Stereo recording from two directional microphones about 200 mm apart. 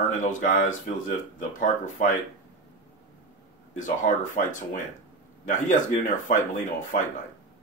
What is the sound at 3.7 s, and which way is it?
Speech, 40° left (ahead or behind).